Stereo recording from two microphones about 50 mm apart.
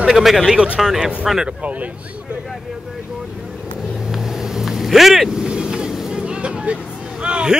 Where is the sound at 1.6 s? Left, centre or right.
Right.